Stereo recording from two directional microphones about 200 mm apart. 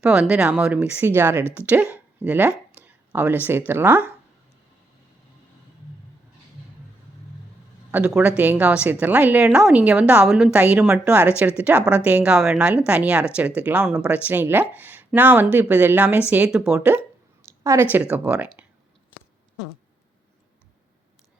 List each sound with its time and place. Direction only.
0.0 s a woman's voice: 5° right (ahead or behind)
2.8 s a sound: 10° right (ahead or behind)
3.7 s a woman's voice: 10° right (ahead or behind)
7.9 s a woman's voice: 10° right (ahead or behind)